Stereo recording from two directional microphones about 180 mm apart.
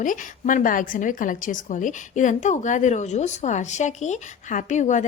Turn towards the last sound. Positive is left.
turn(degrees=40)  # may be behind; listen again after turning